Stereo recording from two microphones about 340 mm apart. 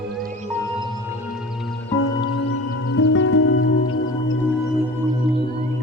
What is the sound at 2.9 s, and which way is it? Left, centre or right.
Music, left.